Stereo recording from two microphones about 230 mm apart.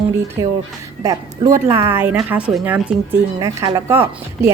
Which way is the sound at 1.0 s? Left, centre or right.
Centre.